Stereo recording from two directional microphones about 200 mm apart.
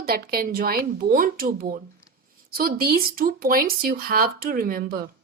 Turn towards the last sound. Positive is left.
turn(degrees=-45)  # may be behind; listen again after turning